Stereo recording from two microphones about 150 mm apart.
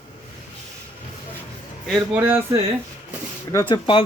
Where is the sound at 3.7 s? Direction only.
35° left (ahead or behind).